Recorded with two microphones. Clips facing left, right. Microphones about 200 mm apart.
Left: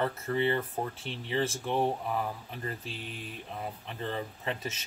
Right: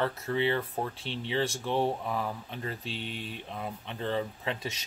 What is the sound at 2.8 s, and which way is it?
Speech, 30° right (ahead or behind).